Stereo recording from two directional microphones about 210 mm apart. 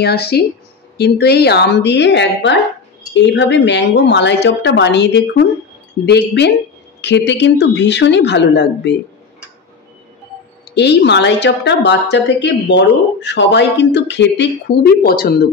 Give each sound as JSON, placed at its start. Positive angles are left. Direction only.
{"t": 0.0, "sound": "a woman's voice", "side_deg": 50}
{"t": 10.7, "sound": "a woman's voice", "side_deg": 55}